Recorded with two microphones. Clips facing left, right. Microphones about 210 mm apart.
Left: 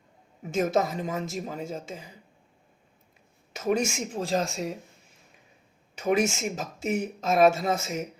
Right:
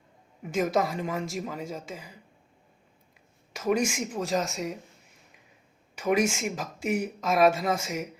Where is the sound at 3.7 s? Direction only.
25° left (ahead or behind).